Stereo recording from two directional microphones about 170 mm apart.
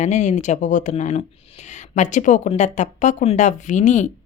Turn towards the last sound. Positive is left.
turn(degrees=45)  # may be behind; listen again after turning